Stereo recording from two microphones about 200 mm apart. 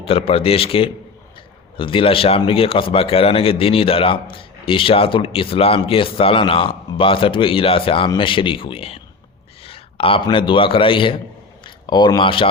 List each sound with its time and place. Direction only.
0.0 s a man's voice: 30° left (ahead or behind)